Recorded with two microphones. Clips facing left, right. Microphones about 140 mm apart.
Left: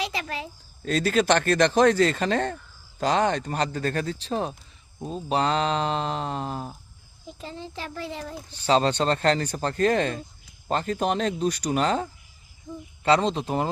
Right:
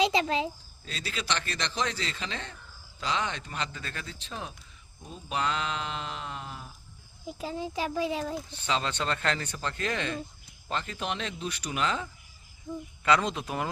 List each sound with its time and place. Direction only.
0.0 s a child's voice: 25° right (ahead or behind)
0.8 s speech: 50° left (ahead or behind)
7.3 s speech: 10° right (ahead or behind)
8.4 s speech: 35° left (ahead or behind)
13.1 s speech: 30° left (ahead or behind)